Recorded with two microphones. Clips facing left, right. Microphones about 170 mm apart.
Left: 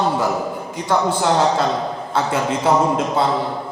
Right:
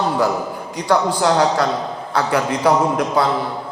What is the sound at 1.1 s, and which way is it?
Mantra, 25° left (ahead or behind).